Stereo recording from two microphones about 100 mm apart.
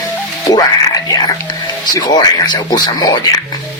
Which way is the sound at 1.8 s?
45° left (ahead or behind).